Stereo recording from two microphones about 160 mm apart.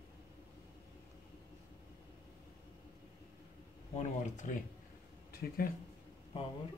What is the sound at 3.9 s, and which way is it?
Speech, 50° left (ahead or behind).